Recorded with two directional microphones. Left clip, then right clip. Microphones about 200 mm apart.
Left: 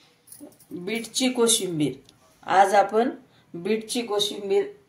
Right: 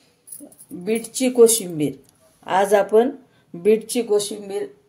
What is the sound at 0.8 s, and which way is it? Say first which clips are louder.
Speech: right 4 dB; 50° right (ahead or behind).